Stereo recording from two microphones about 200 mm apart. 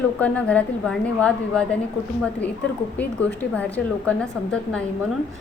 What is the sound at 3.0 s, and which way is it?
A woman's voice, 5° left (ahead or behind).